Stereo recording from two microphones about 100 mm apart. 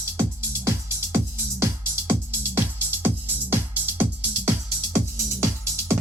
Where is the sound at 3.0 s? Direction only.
20° right (ahead or behind).